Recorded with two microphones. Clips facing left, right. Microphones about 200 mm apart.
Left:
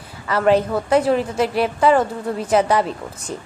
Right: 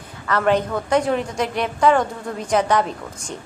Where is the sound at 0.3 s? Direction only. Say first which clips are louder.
Left 3 dB; 5° left (ahead or behind).